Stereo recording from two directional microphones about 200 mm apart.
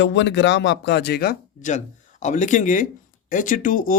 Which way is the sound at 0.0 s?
65° left (ahead or behind).